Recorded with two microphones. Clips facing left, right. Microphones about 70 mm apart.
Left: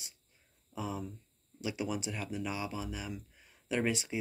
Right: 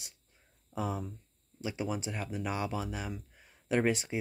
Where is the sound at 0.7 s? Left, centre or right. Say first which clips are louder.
Right 3 dB; right.